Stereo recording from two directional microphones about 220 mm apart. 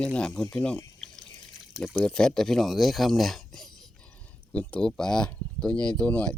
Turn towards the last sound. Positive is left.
turn(degrees=5)  # may be behind; listen again after turning